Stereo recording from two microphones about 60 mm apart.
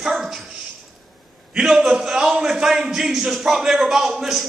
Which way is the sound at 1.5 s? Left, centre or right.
Centre.